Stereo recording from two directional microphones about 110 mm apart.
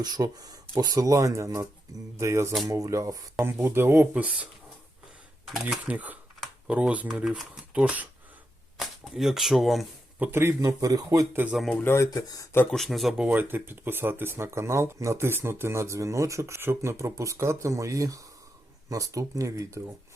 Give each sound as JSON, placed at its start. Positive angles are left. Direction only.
{"t": 0.0, "sound": "a man's voice", "side_deg": -35}
{"t": 3.4, "sound": "speech", "side_deg": -20}
{"t": 5.6, "sound": "speech", "side_deg": -15}
{"t": 10.2, "sound": "a man's voice", "side_deg": -25}
{"t": 11.7, "sound": "speech", "side_deg": 15}
{"t": 11.9, "sound": "speech", "side_deg": 30}
{"t": 12.7, "sound": "speech", "side_deg": 0}
{"t": 13.2, "sound": "a man's voice", "side_deg": -15}